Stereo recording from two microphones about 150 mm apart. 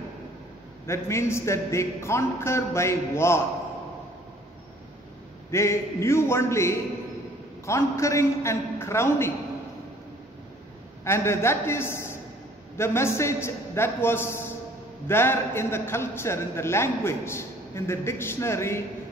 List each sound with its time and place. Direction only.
0.8 s a man's voice: 20° left (ahead or behind)
5.5 s a man's voice: 20° left (ahead or behind)
11.1 s a man's voice: 15° left (ahead or behind)